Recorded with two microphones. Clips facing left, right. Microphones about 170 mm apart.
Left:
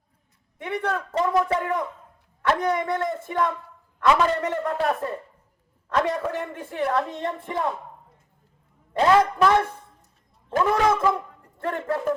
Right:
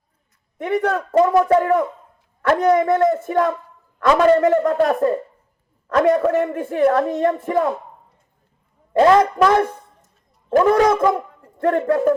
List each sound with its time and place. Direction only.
0.6 s a woman's voice: 45° right (ahead or behind)
8.9 s a woman's voice: 40° right (ahead or behind)